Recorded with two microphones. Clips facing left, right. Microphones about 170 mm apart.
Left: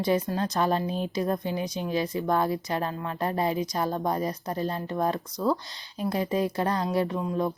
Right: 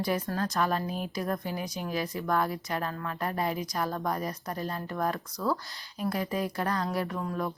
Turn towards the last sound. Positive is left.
turn(degrees=20)  # may be behind; listen again after turning